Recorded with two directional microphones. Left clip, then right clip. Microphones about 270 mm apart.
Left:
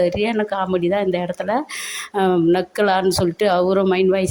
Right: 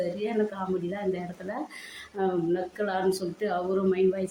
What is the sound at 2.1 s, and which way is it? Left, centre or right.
Speech, left.